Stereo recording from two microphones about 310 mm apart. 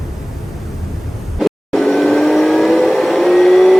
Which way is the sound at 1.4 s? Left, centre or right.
Centre.